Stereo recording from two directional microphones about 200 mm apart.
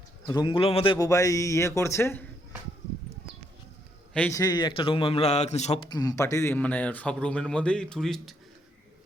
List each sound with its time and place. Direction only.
0.3 s a man's voice: 20° left (ahead or behind)
4.1 s a man's voice: 5° left (ahead or behind)
4.4 s a man's voice: 20° left (ahead or behind)
5.9 s speech: 20° left (ahead or behind); by 8.4 s centre (ahead or behind)